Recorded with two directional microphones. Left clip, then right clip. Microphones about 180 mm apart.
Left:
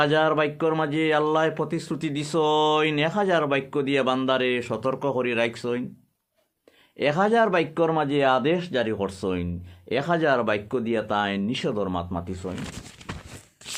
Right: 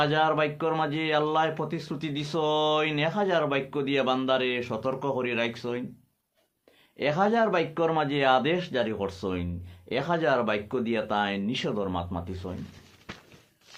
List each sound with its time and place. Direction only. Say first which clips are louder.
0.0 s speech: left 3 dB; 45° left (ahead or behind)
7.0 s speech: left 4 dB; 45° left (ahead or behind)